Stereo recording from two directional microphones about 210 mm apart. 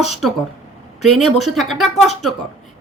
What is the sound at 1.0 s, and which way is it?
A woman's voice, centre (ahead or behind).